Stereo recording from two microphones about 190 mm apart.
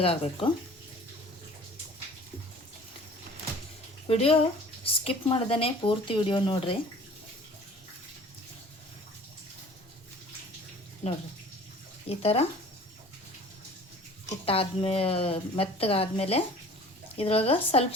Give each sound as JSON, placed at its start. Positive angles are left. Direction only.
{"t": 0.0, "sound": "a woman's voice", "side_deg": 30}
{"t": 4.1, "sound": "a woman's voice", "side_deg": 30}
{"t": 11.0, "sound": "a woman's voice", "side_deg": 40}
{"t": 14.3, "sound": "a woman's voice", "side_deg": 30}